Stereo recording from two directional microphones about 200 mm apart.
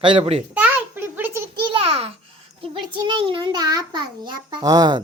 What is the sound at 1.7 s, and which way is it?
Babbling, 30° right (ahead or behind).